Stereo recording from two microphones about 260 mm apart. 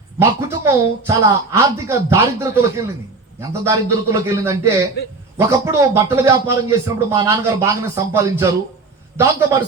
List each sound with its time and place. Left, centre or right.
0.2 s a man's voice: centre